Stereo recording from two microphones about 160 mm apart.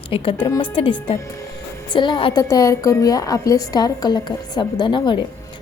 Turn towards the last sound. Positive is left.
turn(degrees=30)  # may be behind; listen again after turning